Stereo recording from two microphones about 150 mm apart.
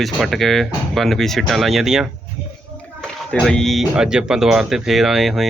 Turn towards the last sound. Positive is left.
turn(degrees=0)  # may be behind; listen again after turning